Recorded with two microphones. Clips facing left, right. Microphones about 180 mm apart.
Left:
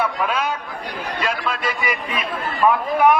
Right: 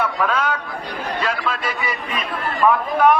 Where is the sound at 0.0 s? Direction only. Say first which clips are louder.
Right 1 dB; 10° left (ahead or behind).